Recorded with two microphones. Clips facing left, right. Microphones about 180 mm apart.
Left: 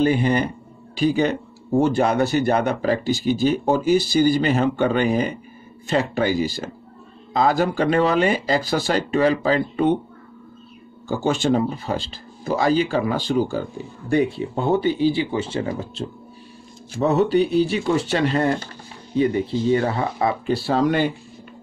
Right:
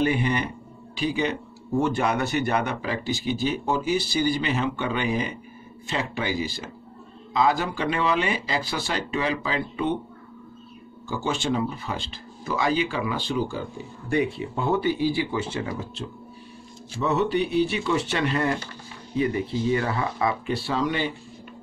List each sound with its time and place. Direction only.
0.0 s speech: 35° left (ahead or behind)
11.1 s speech: 45° left (ahead or behind)